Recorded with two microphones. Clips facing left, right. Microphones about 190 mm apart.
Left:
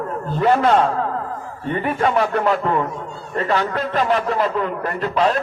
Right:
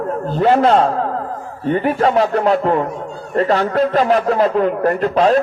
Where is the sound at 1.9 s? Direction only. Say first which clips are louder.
Right 4 dB; 35° right (ahead or behind).